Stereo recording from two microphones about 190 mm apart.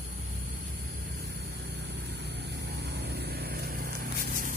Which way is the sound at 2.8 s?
60° right (ahead or behind).